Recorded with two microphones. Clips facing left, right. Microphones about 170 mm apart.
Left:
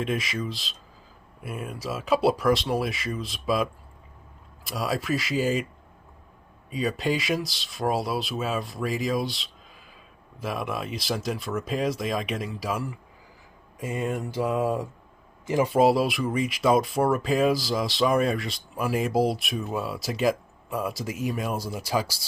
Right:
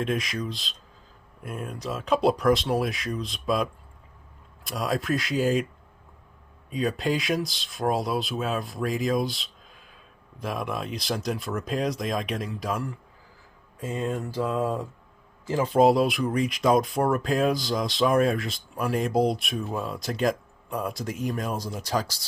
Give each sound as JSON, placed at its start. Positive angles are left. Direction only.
{"t": 0.0, "sound": "speech", "side_deg": 0}
{"t": 6.7, "sound": "speech", "side_deg": 0}
{"t": 13.7, "sound": "mantra", "side_deg": 15}
{"t": 15.4, "sound": "speech", "side_deg": 15}